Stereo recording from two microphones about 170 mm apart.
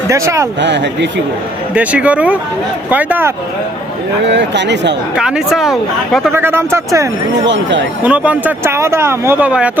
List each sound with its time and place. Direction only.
0.1 s speech: 15° right (ahead or behind)
0.6 s speech: 90° right
1.7 s speech: 5° right (ahead or behind)
4.3 s speech: 90° right
5.1 s speech: 5° right (ahead or behind)
6.3 s speech: 15° right (ahead or behind)
7.4 s speech: 90° right
8.0 s speech: 5° right (ahead or behind)